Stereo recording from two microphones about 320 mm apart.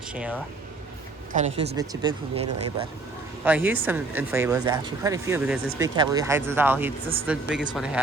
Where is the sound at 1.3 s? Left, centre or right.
Right.